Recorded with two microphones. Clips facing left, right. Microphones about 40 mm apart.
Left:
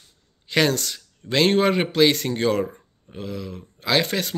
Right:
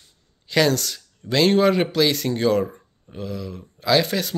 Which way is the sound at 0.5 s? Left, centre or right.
Left.